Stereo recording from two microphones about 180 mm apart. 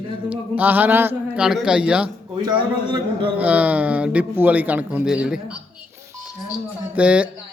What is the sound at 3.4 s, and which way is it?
Speech, 10° right (ahead or behind).